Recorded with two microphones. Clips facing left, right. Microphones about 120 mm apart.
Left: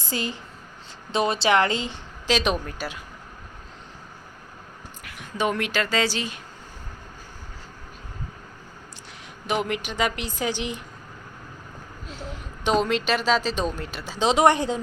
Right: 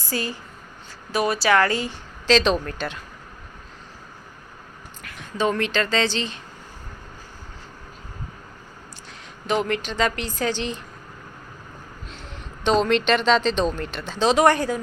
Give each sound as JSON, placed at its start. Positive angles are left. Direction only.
{"t": 0.0, "sound": "a woman's voice", "side_deg": 20}
{"t": 5.0, "sound": "speech", "side_deg": 15}
{"t": 9.5, "sound": "a woman's voice", "side_deg": 15}
{"t": 12.0, "sound": "a woman's voice", "side_deg": 5}